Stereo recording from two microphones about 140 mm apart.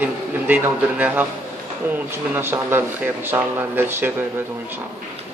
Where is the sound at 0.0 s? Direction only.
10° right (ahead or behind).